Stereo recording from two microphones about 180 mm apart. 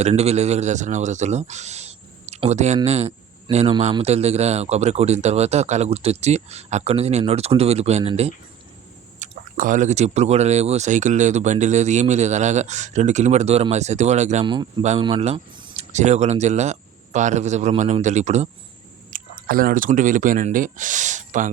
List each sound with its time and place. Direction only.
0.0 s speech: 35° right (ahead or behind)
14.4 s speech: 25° right (ahead or behind)
19.1 s a sound: 45° right (ahead or behind)
19.5 s speech: 55° right (ahead or behind)